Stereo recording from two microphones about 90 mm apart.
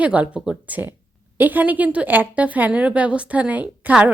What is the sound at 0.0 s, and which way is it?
A woman's voice, 15° right (ahead or behind).